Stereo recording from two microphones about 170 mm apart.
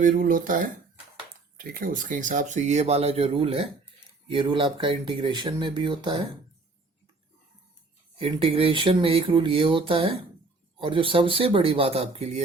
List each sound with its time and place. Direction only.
0.0 s speech: 55° right (ahead or behind); by 6.2 s 30° right (ahead or behind)
8.2 s speech: 30° right (ahead or behind)